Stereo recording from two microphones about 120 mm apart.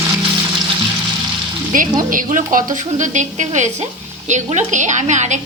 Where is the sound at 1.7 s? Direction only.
90° right.